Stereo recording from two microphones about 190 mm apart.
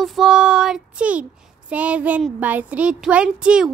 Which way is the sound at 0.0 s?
Centre (ahead or behind).